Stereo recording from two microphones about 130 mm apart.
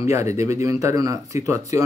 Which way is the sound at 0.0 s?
20° right (ahead or behind).